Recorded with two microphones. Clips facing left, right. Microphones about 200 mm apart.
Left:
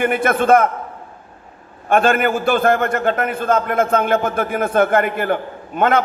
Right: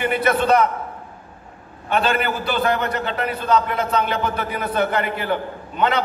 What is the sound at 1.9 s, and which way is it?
A man's voice, 50° left (ahead or behind).